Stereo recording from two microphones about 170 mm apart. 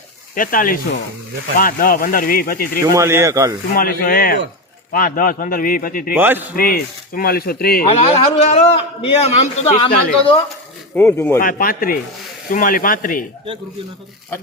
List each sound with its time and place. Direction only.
0.3 s a man's voice: 55° left (ahead or behind)
2.9 s speech: 15° right (ahead or behind)
3.8 s a man's voice: 60° left (ahead or behind)
6.1 s speech: 10° right (ahead or behind)
6.6 s a man's voice: 60° left (ahead or behind)
7.9 s a man's voice: 40° left (ahead or behind)
10.9 s speech: 15° left (ahead or behind)
11.3 s a man's voice: 55° left (ahead or behind)